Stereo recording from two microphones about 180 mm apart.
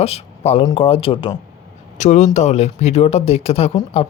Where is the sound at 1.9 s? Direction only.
40° left (ahead or behind).